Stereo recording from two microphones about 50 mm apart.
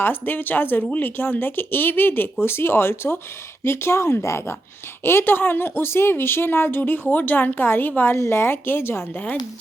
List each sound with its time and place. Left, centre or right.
0.0 s speech: left
2.4 s speech: left
5.0 s speech: left
8.1 s speech: left
9.1 s speech: left